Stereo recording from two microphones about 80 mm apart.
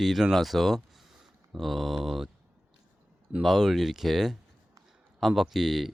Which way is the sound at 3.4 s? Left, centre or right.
Centre.